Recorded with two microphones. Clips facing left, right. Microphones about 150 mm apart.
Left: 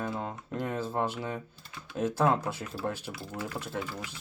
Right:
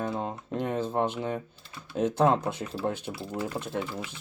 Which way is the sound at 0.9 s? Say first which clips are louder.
Right 4 dB; 20° right (ahead or behind).